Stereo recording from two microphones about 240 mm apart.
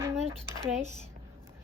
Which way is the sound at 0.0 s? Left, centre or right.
Centre.